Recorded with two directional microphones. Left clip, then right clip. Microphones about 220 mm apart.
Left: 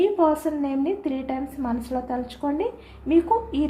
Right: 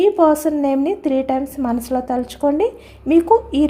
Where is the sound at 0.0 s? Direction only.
55° right (ahead or behind).